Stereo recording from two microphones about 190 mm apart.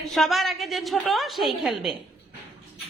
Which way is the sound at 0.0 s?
Centre (ahead or behind).